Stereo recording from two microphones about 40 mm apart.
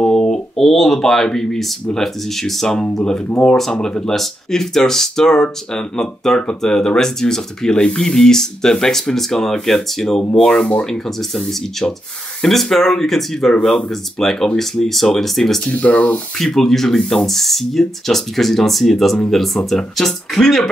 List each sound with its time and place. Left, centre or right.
0.0 s a sound: centre
0.6 s speech: centre
3.8 s speech: centre
15.7 s speech: left
16.3 s speech: centre